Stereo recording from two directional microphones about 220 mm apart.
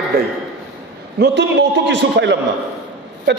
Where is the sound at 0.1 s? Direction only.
45° right (ahead or behind).